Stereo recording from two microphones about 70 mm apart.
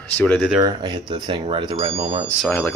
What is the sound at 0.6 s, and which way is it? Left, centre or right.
Speech, right.